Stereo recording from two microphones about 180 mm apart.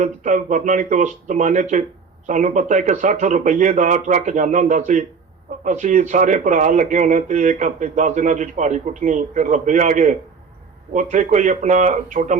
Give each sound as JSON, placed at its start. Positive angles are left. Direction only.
{"t": 0.0, "sound": "speech", "side_deg": -45}